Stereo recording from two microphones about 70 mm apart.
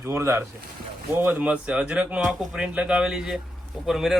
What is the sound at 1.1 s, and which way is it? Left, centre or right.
Speech, right.